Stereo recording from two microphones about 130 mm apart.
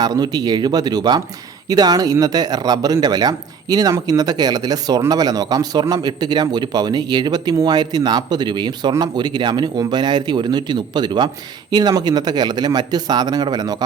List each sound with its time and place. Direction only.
0.0 s speech: 30° right (ahead or behind)